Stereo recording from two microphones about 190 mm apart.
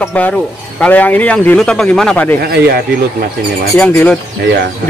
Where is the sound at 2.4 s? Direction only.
55° right (ahead or behind).